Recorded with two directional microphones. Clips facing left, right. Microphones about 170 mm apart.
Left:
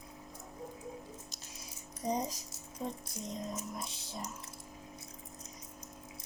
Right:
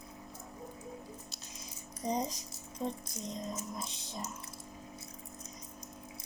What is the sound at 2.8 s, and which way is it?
Speech, 10° left (ahead or behind).